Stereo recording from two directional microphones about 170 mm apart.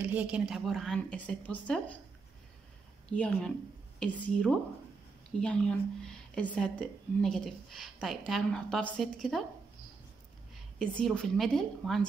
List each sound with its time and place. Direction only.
0.0 s speech: 10° right (ahead or behind); by 2.0 s 10° left (ahead or behind)
3.1 s speech: 5° left (ahead or behind)
10.8 s speech: 5° left (ahead or behind)